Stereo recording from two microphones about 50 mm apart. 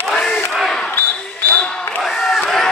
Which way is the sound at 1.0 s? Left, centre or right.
Left.